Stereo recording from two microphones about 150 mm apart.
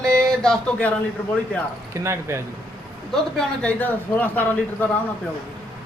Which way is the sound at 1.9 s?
20° right (ahead or behind).